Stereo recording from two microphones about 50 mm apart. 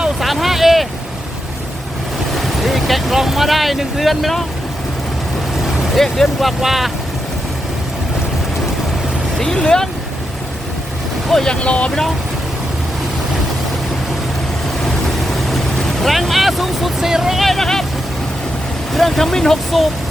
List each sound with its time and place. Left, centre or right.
0.2 s vehicle: centre
2.3 s speech: centre
5.9 s speech: centre
9.4 s speech: centre
11.4 s speech: left
16.0 s speech: centre
17.4 s speech: centre
18.9 s speech: centre